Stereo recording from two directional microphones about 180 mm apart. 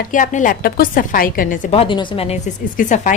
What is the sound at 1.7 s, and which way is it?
A woman's voice, 30° left (ahead or behind).